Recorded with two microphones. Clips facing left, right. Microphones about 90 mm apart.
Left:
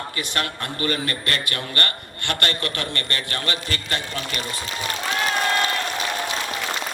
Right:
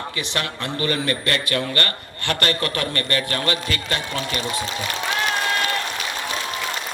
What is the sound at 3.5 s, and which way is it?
Speech, 40° left (ahead or behind).